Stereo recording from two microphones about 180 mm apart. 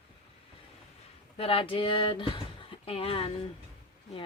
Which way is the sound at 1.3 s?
30° left (ahead or behind).